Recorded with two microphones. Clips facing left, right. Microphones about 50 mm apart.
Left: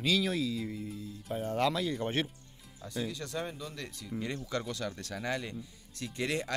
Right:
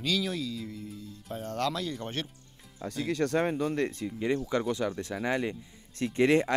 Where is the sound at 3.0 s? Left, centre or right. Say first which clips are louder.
Right 9 dB; right.